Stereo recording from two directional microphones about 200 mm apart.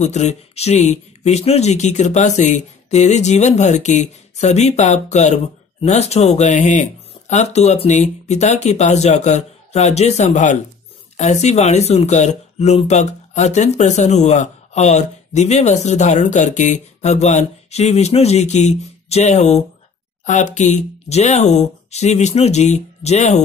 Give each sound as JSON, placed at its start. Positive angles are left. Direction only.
{"t": 0.0, "sound": "speech", "side_deg": 35}